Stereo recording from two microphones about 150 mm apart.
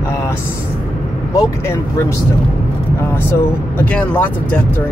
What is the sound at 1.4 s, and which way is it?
Speech, 20° left (ahead or behind).